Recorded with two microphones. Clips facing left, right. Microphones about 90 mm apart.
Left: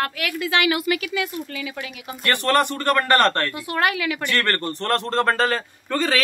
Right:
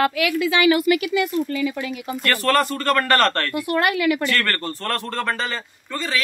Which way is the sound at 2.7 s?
20° left (ahead or behind).